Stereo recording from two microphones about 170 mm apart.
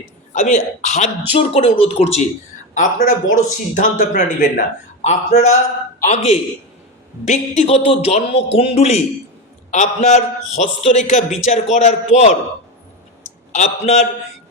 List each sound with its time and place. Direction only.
0.3 s a man's voice: 45° left (ahead or behind)
2.7 s a man's voice: 50° left (ahead or behind)
13.5 s a man's voice: 45° left (ahead or behind)